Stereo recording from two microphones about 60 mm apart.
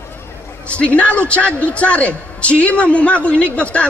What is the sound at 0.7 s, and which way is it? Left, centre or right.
A man's voice, left.